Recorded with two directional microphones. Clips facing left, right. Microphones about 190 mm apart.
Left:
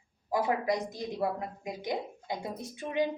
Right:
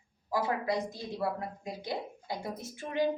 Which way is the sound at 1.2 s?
20° left (ahead or behind).